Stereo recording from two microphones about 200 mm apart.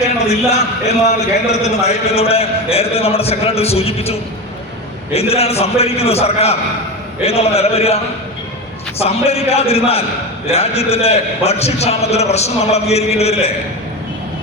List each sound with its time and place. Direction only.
0.9 s a man's voice: 35° left (ahead or behind)